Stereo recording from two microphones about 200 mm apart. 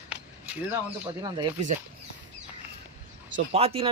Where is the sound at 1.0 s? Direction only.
20° right (ahead or behind).